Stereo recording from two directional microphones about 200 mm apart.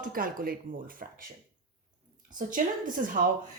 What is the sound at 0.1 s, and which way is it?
Speech, 45° right (ahead or behind).